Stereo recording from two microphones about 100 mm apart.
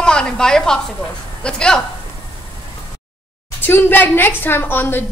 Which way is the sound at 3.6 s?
20° left (ahead or behind).